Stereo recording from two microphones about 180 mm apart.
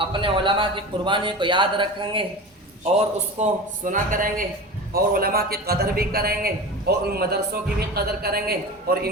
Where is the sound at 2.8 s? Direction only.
40° right (ahead or behind).